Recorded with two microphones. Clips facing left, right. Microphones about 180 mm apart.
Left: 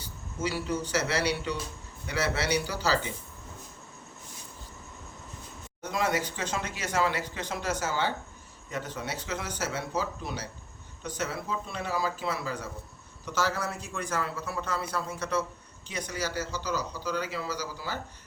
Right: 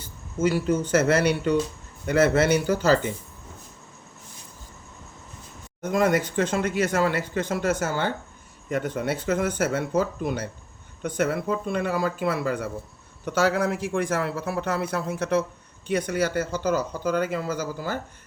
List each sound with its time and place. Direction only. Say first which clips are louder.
0.0 s speech: right 9 dB; 50° right (ahead or behind)
5.8 s a man's voice: right 7 dB; 50° right (ahead or behind)